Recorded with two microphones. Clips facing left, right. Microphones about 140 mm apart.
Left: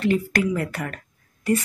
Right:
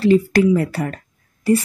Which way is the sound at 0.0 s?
30° right (ahead or behind).